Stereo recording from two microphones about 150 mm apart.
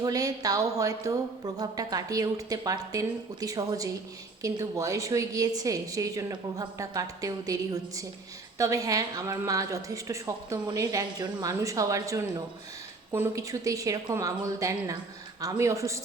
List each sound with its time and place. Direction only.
0.0 s a woman's voice: 25° right (ahead or behind)